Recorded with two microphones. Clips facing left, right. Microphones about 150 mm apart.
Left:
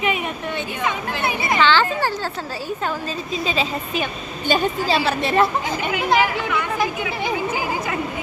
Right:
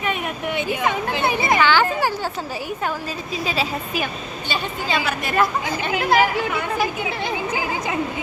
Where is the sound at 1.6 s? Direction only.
10° right (ahead or behind).